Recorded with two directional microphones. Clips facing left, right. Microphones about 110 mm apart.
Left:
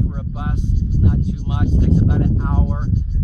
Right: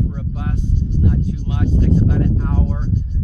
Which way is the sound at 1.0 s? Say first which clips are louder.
Even; 25° left (ahead or behind).